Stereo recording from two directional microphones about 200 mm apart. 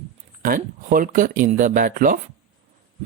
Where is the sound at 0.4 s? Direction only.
45° right (ahead or behind).